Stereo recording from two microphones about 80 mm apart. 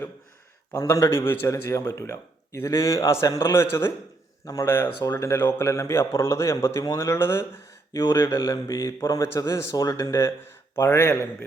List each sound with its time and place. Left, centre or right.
0.7 s speech: left
3.5 s speech: left